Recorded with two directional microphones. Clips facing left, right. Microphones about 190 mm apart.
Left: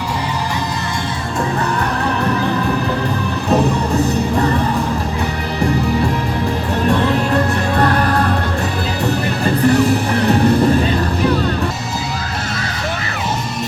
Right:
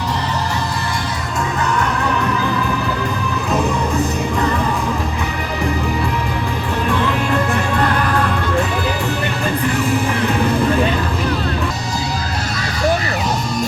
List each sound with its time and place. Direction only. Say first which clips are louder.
6.8 s music: left 4 dB; 40° left (ahead or behind)